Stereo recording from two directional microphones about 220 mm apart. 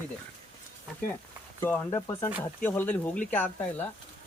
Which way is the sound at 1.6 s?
10° left (ahead or behind).